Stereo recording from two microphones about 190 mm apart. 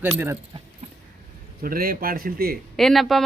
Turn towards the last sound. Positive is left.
turn(degrees=0)  # may be behind; listen again after turning